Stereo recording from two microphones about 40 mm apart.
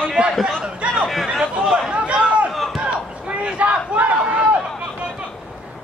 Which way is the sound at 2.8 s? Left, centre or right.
Right.